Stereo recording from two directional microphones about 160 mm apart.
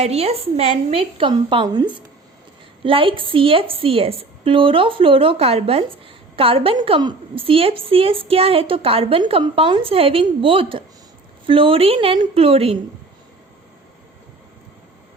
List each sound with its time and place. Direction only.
0.0 s a woman's voice: 40° right (ahead or behind)